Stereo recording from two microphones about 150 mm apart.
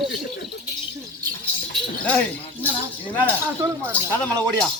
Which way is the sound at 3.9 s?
10° left (ahead or behind).